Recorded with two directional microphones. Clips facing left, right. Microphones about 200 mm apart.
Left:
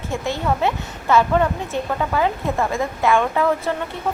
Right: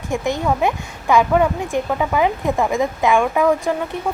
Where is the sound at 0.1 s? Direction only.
15° right (ahead or behind).